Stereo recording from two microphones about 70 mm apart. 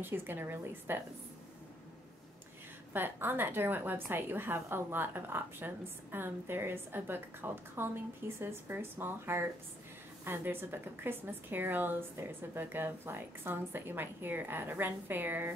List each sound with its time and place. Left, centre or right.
0.0 s a woman's voice: right
2.9 s a woman's voice: right